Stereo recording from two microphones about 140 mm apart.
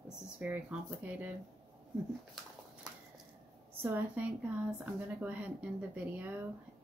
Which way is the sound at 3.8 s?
10° right (ahead or behind).